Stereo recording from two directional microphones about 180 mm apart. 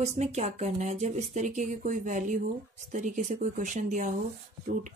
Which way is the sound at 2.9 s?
45° right (ahead or behind).